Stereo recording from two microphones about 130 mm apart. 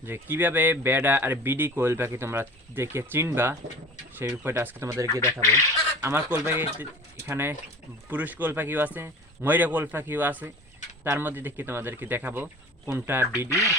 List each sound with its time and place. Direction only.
0.0 s speech: 15° right (ahead or behind)
5.2 s speech: 20° left (ahead or behind)
6.0 s speech: 20° right (ahead or behind)